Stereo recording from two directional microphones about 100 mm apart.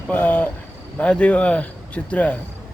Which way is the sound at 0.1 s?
20° left (ahead or behind).